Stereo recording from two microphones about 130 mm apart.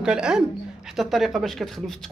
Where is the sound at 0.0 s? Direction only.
5° right (ahead or behind).